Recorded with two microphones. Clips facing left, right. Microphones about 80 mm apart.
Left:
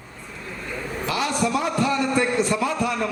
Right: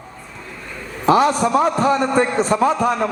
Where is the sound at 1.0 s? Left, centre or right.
Right.